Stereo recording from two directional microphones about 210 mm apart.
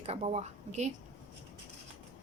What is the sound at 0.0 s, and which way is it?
Speech, 30° right (ahead or behind).